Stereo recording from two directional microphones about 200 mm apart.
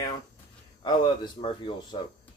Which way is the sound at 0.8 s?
25° left (ahead or behind).